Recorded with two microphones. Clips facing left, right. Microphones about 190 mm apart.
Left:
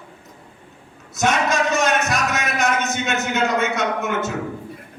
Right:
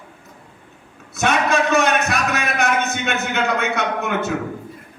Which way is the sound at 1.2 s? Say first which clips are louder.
Right 1 dB; 60° right (ahead or behind).